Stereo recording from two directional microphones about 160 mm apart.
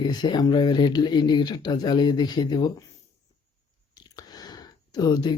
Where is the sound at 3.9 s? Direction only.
25° left (ahead or behind).